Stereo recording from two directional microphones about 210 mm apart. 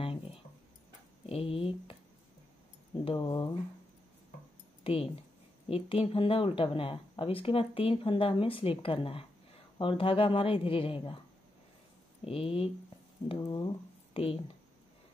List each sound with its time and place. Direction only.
0.0 s a sound: 25° left (ahead or behind)
1.2 s speech: 25° left (ahead or behind)
3.1 s speech: 20° left (ahead or behind)
4.8 s speech: 25° left (ahead or behind)
12.3 s speech: 25° left (ahead or behind)